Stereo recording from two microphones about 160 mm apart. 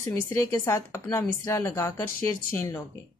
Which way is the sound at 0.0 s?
15° left (ahead or behind).